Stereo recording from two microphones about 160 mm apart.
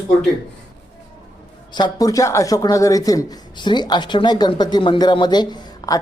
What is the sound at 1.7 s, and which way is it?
A man's voice, 25° left (ahead or behind).